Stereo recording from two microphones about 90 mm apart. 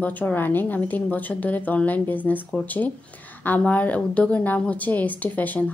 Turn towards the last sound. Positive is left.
turn(degrees=20)  # may be behind; listen again after turning